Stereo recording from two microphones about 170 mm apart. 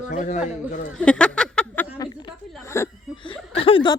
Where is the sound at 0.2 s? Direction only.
45° left (ahead or behind).